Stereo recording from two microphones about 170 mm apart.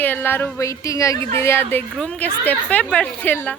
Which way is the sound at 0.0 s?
10° left (ahead or behind).